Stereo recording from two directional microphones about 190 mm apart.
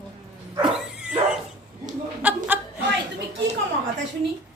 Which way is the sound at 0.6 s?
5° right (ahead or behind).